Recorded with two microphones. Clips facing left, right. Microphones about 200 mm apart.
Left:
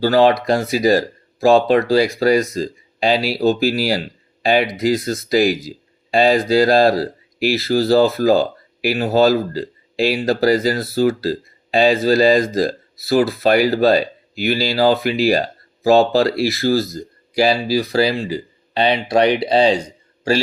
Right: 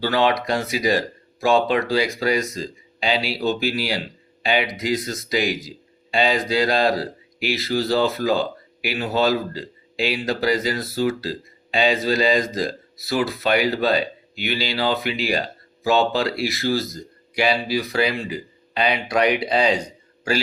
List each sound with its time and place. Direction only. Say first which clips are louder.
0.0 s speech: left 7 dB; 40° left (ahead or behind)